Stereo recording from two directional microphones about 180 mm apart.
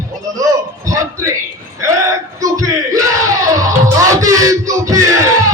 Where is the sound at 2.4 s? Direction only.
20° right (ahead or behind).